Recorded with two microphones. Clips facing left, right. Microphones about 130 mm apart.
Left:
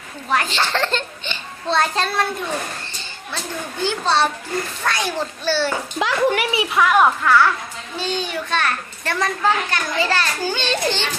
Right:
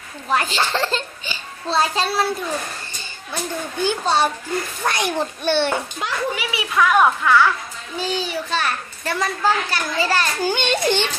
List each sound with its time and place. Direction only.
0.5 s a child's voice: 5° right (ahead or behind)
3.3 s a child's voice: 15° right (ahead or behind)
6.0 s a child's voice: 90° left
6.7 s a child's voice: 5° left (ahead or behind); by 11.1 s 15° right (ahead or behind)